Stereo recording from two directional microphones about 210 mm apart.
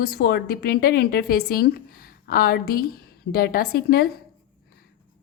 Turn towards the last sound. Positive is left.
turn(degrees=45)  # may be behind; listen again after turning